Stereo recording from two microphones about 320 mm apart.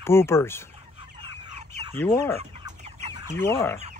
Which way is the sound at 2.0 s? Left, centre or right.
Centre.